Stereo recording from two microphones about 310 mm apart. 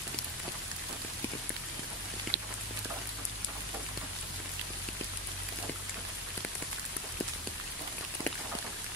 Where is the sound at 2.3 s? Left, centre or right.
Right.